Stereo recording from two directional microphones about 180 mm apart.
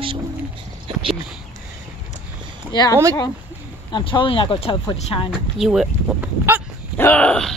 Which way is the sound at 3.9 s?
25° left (ahead or behind).